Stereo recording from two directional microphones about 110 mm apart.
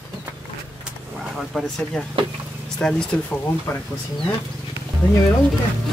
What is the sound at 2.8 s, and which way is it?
Speech, 10° left (ahead or behind).